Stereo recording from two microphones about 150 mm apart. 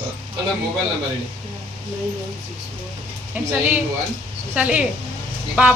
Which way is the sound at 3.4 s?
10° right (ahead or behind).